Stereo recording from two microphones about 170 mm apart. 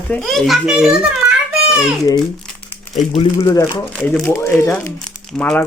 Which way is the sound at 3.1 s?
35° left (ahead or behind).